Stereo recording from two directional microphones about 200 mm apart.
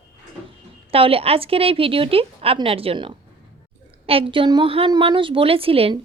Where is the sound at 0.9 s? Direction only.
30° right (ahead or behind).